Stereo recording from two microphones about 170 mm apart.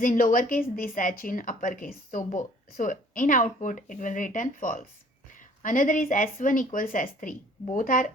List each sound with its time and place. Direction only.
0.0 s a woman's voice: 50° left (ahead or behind)